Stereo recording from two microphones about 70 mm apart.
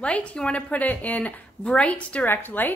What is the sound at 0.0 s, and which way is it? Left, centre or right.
A woman's voice, centre.